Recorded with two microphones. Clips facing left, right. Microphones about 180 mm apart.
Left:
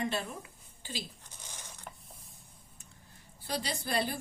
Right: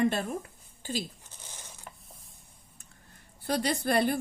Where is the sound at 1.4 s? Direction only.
15° right (ahead or behind).